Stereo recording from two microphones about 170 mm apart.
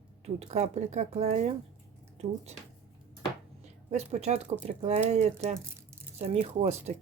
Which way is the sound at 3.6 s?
40° right (ahead or behind).